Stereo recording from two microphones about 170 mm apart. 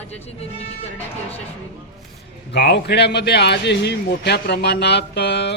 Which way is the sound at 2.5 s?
80° left.